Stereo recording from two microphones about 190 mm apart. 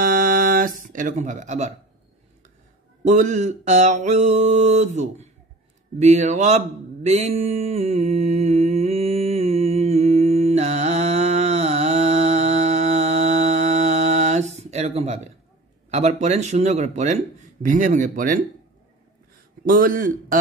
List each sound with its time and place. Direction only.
0.0 s a sound: 45° right (ahead or behind)
0.8 s speech: 45° right (ahead or behind)
3.0 s speech: 40° right (ahead or behind)
5.9 s a sound: 35° right (ahead or behind)
15.9 s speech: 35° right (ahead or behind)
19.7 s a man's voice: 45° right (ahead or behind)